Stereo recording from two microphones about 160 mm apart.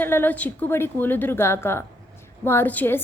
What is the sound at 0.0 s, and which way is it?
A woman's voice, 10° left (ahead or behind).